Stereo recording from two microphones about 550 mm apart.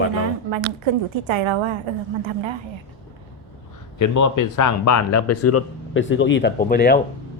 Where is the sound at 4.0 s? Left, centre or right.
Left; by 7.0 s centre.